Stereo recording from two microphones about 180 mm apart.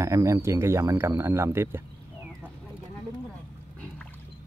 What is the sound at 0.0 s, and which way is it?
Speech, 15° right (ahead or behind).